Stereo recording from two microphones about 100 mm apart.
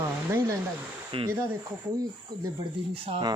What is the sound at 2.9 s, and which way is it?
Speech, 65° right (ahead or behind).